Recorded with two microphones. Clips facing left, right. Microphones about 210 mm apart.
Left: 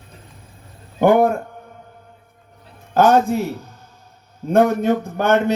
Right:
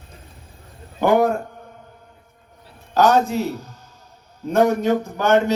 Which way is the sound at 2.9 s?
55° left (ahead or behind).